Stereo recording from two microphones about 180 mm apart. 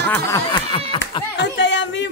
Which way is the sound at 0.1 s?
15° left (ahead or behind).